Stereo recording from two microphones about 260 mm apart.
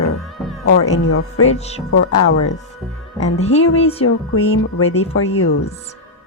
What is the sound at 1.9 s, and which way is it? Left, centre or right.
Speech, left.